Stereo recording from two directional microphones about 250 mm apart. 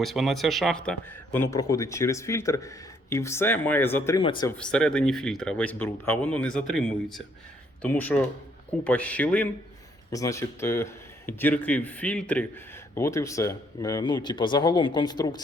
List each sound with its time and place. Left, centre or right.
0.0 s speech: centre
4.5 s speech: centre